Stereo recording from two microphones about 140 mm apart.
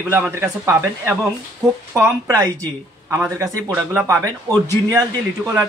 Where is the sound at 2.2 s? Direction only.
25° right (ahead or behind).